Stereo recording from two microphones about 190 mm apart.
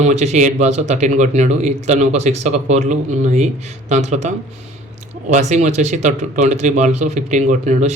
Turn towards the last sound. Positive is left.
turn(degrees=-40)  # may be behind; listen again after turning